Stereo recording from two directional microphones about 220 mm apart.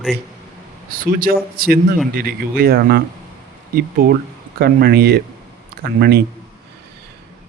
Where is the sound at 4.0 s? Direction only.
40° right (ahead or behind).